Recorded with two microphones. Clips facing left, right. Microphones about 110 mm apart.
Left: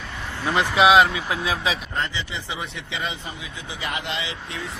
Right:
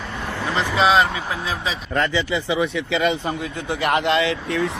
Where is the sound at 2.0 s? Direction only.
70° right (ahead or behind).